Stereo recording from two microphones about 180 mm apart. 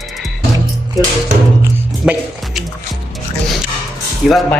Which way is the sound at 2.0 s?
5° right (ahead or behind).